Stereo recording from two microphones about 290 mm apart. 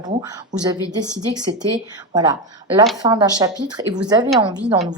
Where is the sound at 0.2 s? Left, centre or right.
Centre.